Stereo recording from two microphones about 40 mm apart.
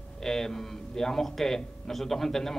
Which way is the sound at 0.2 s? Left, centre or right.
Centre.